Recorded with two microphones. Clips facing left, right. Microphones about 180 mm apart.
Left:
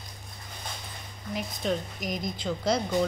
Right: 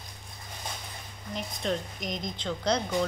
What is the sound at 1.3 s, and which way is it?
A woman's voice, 5° left (ahead or behind).